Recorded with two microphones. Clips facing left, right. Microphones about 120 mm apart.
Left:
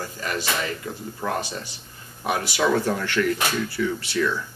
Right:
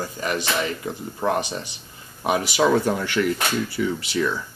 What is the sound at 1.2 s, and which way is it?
A man's voice, 20° right (ahead or behind).